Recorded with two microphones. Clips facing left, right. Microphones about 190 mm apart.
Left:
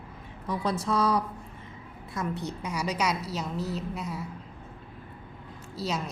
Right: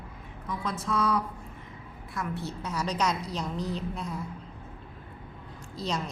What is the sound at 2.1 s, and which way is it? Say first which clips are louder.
A woman's voice: left 2 dB; 20° left (ahead or behind).